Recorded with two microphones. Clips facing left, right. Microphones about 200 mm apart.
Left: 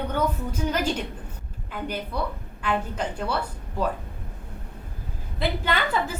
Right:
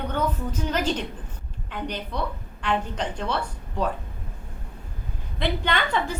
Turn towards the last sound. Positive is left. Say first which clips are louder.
# even
turn(degrees=5)  # may be behind; listen again after turning